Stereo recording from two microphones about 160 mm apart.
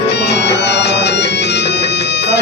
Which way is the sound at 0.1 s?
90° left.